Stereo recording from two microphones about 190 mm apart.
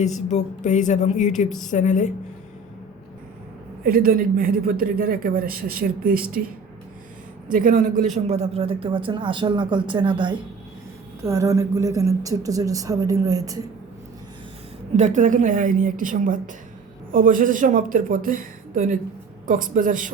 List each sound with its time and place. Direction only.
0.0 s speech: 35° left (ahead or behind)
1.5 s a woman's voice: centre (ahead or behind)
1.7 s speech: 40° left (ahead or behind)
3.8 s a man's voice: 50° right (ahead or behind)
7.5 s a man's voice: 45° right (ahead or behind); by 13.6 s 20° right (ahead or behind)
14.9 s a man's voice: 40° right (ahead or behind)